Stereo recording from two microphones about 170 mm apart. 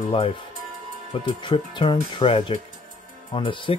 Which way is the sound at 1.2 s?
30° left (ahead or behind).